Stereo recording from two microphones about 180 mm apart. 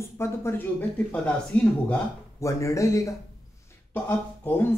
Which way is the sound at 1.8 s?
10° left (ahead or behind).